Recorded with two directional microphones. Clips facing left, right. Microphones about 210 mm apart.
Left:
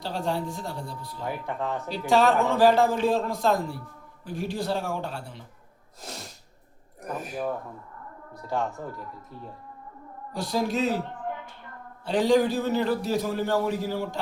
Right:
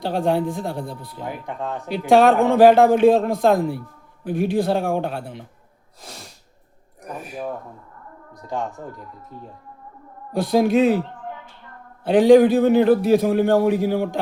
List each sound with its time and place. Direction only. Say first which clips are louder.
0.0 s a man's voice: right 8 dB; 55° right (ahead or behind)
1.2 s speech: right 1 dB; 15° right (ahead or behind)
1.9 s a man's voice: right 7 dB; 55° right (ahead or behind)
7.0 s speech: even; centre (ahead or behind)
8.3 s speech: right 1 dB; 15° right (ahead or behind)
10.3 s a man's voice: right 10 dB; 55° right (ahead or behind)
12.0 s a man's voice: right 9 dB; 55° right (ahead or behind)